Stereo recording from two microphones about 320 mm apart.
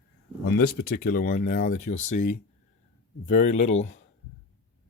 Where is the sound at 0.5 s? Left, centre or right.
Left.